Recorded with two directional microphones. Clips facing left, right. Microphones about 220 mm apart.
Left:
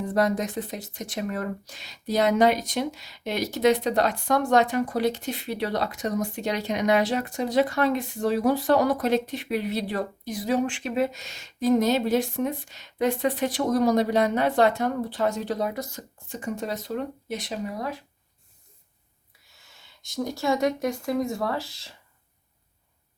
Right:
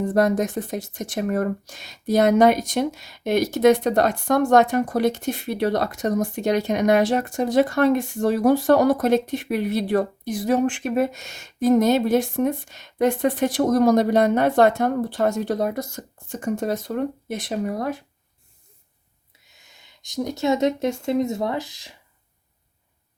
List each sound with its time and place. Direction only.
0.0 s speech: 50° right (ahead or behind)
19.5 s speech: 20° right (ahead or behind)